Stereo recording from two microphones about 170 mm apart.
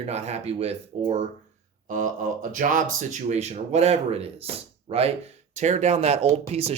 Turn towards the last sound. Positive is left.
turn(degrees=-35)  # may be behind; listen again after turning